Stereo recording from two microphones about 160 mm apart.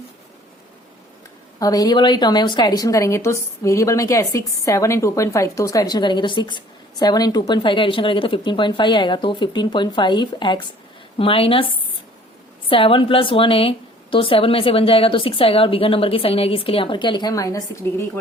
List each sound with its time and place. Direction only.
1.5 s a woman's voice: 25° left (ahead or behind)